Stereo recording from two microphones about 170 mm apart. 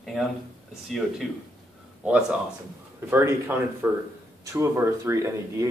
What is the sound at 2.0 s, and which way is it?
Speech, 5° right (ahead or behind).